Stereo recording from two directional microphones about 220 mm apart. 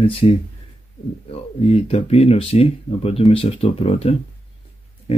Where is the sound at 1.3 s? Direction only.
25° left (ahead or behind).